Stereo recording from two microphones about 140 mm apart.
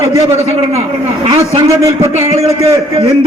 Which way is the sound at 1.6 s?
20° right (ahead or behind).